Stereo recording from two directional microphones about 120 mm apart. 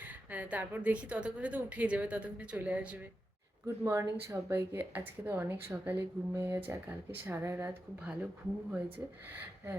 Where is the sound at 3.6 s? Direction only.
20° right (ahead or behind).